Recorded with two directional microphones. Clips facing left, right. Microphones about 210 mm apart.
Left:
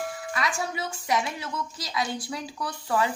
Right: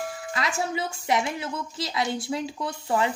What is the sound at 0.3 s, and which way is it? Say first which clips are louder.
A woman's voice: right 3 dB; 25° right (ahead or behind).